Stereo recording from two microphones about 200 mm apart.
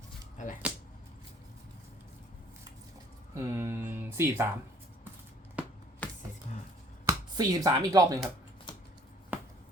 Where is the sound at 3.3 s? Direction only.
15° right (ahead or behind).